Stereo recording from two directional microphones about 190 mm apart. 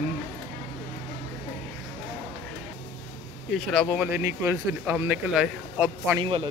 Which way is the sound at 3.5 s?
Centre (ahead or behind).